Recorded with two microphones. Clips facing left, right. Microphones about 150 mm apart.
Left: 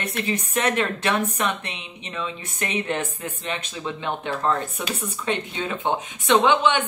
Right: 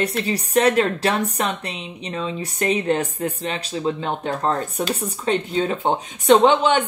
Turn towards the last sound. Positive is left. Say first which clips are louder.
# right 4 dB
turn(degrees=-35)  # may be behind; listen again after turning